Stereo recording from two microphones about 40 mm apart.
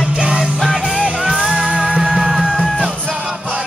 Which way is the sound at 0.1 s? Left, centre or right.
Right.